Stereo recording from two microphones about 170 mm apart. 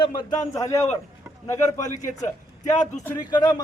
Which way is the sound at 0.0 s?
25° left (ahead or behind).